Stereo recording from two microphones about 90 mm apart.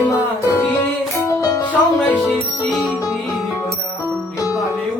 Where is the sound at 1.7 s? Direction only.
15° left (ahead or behind).